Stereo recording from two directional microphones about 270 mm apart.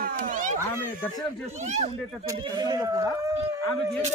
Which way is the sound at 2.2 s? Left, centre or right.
Centre.